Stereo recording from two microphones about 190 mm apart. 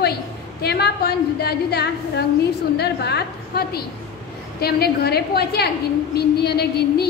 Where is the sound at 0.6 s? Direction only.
60° left (ahead or behind).